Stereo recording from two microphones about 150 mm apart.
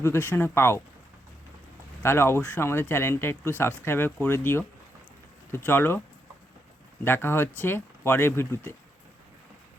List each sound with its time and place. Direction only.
0.0 s speech: 15° left (ahead or behind)
2.0 s speech: 15° left (ahead or behind)
7.0 s speech: 15° left (ahead or behind)